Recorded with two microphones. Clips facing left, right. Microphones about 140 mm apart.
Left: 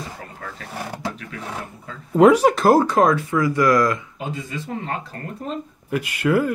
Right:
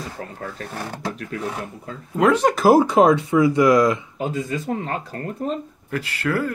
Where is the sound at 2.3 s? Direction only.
Centre (ahead or behind); by 4.0 s 15° right (ahead or behind).